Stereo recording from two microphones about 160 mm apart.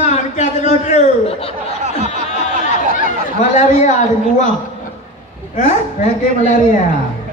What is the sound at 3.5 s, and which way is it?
Speech, 50° left (ahead or behind).